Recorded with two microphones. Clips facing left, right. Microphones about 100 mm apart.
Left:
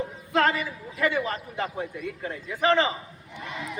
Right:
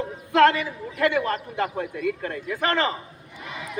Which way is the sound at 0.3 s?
75° right (ahead or behind).